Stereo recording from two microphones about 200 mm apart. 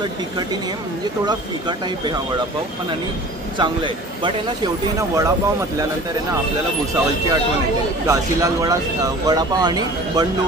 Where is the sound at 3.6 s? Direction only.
25° right (ahead or behind).